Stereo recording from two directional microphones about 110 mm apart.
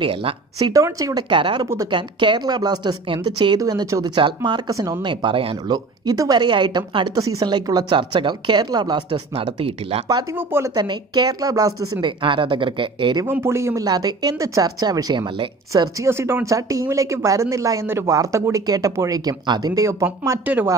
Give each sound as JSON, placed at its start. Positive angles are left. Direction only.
{"t": 0.0, "sound": "speech", "side_deg": -55}
{"t": 0.6, "sound": "a woman's voice", "side_deg": -30}
{"t": 1.3, "sound": "a woman's voice", "side_deg": -50}
{"t": 5.0, "sound": "speech", "side_deg": -50}
{"t": 6.0, "sound": "a woman's voice", "side_deg": -35}
{"t": 9.1, "sound": "speech", "side_deg": -60}
{"t": 10.3, "sound": "speech", "side_deg": -20}
{"t": 10.7, "sound": "a woman's voice", "side_deg": -40}
{"t": 12.0, "sound": "speech", "side_deg": -50}
{"t": 13.3, "sound": "speech", "side_deg": -25}
{"t": 13.8, "sound": "a woman's voice", "side_deg": -35}
{"t": 20.4, "sound": "speech", "side_deg": -15}